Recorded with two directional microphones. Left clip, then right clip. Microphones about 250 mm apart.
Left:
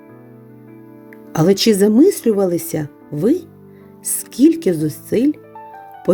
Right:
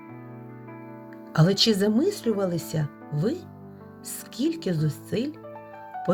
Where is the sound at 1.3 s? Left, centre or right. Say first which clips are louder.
Left 8 dB; left.